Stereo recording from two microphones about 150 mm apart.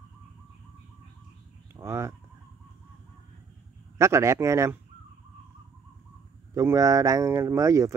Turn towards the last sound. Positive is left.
turn(degrees=-20)  # may be behind; listen again after turning